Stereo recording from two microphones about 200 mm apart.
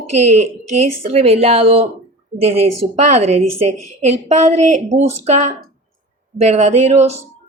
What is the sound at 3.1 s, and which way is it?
A woman's voice, 35° right (ahead or behind).